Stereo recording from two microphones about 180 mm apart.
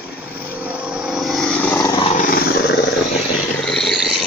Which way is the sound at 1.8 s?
20° left (ahead or behind).